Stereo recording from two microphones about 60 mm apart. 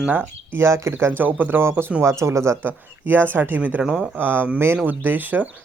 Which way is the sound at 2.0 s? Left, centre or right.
Right.